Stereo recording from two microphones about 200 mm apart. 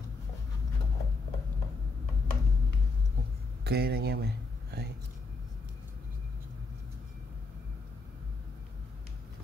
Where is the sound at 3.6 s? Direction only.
50° right (ahead or behind).